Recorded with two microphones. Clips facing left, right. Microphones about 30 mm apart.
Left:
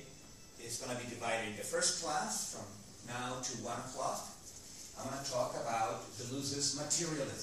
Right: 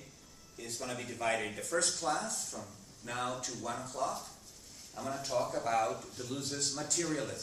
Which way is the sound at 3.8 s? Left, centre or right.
Right.